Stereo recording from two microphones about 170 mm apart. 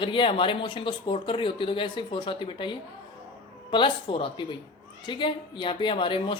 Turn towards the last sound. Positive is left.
turn(degrees=30)  # may be behind; listen again after turning